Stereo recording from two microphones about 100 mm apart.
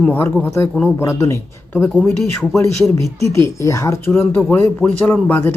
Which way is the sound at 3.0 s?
30° left (ahead or behind).